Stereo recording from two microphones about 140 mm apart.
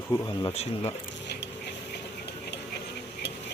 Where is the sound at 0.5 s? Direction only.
45° left (ahead or behind).